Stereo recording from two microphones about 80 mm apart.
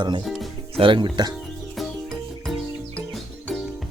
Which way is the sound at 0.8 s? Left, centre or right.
Right.